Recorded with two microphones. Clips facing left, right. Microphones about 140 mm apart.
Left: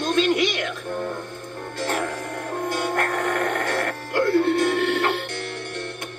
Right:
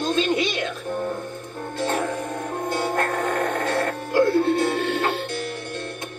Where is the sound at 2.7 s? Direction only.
25° right (ahead or behind).